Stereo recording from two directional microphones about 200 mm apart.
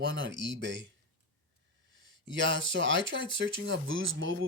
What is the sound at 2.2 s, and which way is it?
Speech, 65° right (ahead or behind).